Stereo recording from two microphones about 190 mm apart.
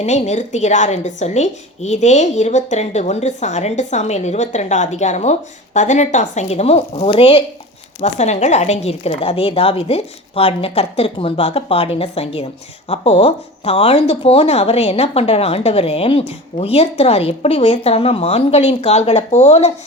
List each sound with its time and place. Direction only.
0.0 s a woman's voice: 35° left (ahead or behind)